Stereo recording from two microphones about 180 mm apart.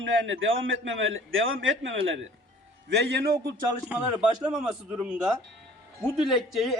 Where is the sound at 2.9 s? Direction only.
70° right (ahead or behind).